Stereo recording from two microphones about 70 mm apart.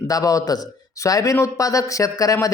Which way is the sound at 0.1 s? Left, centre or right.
Left.